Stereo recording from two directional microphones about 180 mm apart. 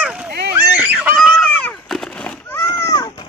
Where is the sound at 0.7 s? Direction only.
10° right (ahead or behind).